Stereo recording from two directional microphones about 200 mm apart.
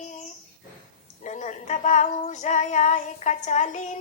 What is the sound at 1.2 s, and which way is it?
Female singing, 35° left (ahead or behind).